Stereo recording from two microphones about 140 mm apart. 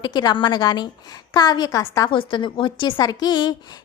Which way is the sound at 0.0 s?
30° left (ahead or behind).